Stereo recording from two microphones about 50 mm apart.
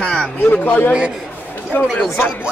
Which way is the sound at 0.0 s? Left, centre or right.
Centre.